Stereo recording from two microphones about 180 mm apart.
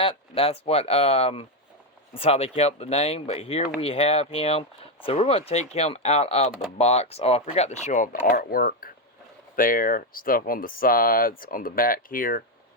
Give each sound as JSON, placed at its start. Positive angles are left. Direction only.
{"t": 0.0, "sound": "speech", "side_deg": 30}
{"t": 6.5, "sound": "speech", "side_deg": -5}
{"t": 6.7, "sound": "speech", "side_deg": 35}